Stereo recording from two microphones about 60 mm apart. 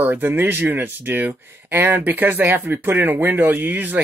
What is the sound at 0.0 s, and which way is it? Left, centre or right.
Speech, right.